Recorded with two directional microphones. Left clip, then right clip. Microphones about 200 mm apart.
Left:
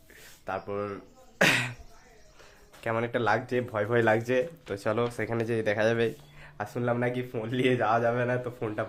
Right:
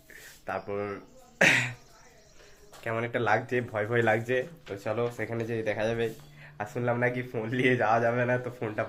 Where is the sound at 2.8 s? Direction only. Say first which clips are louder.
Left 2 dB; 25° left (ahead or behind); by 6.5 s 40° left (ahead or behind).